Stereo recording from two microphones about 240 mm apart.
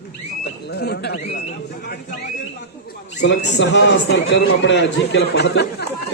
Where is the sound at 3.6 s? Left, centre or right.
Left.